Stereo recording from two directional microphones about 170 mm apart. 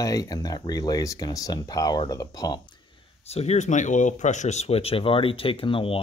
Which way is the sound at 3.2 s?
40° left (ahead or behind).